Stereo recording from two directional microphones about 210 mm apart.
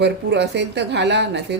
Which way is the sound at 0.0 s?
55° right (ahead or behind).